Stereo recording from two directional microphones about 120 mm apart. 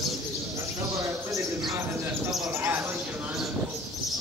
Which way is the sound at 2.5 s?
15° right (ahead or behind).